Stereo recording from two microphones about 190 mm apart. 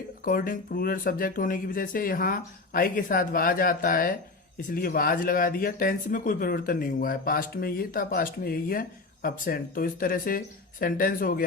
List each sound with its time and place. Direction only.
0.3 s speech: 45° left (ahead or behind)